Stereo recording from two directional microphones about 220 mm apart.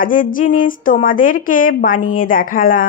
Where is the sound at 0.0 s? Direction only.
40° left (ahead or behind).